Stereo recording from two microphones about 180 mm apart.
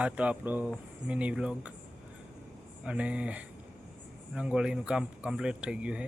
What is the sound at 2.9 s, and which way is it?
Speech, 5° right (ahead or behind).